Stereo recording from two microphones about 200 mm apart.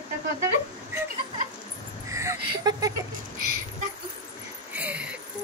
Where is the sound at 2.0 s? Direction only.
15° right (ahead or behind).